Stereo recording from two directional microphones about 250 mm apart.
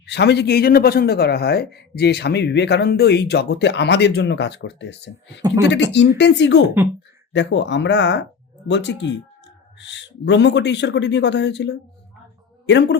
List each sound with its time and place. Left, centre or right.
0.0 s a man's voice: left